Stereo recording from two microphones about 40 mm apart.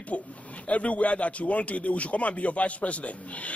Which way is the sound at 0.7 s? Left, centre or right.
Left.